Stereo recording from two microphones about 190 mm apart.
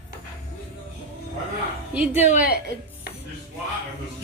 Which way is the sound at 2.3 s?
45° left (ahead or behind).